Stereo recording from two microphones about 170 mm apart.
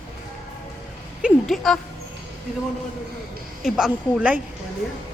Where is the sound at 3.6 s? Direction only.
5° right (ahead or behind).